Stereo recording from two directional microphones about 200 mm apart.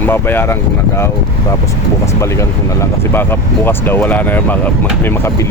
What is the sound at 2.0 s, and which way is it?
Speech, 15° left (ahead or behind).